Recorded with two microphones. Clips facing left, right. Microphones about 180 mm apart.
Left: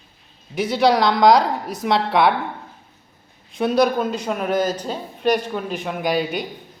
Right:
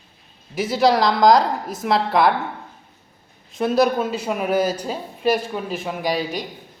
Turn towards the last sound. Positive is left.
turn(degrees=0)  # may be behind; listen again after turning